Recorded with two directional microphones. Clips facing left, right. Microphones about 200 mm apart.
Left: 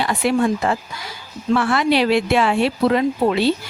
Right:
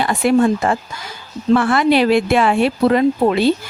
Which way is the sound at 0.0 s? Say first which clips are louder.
Right 4 dB; 50° right (ahead or behind).